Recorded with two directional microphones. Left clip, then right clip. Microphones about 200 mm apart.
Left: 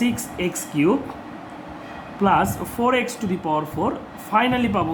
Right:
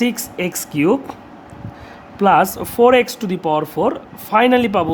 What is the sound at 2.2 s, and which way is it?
Speech, 50° right (ahead or behind).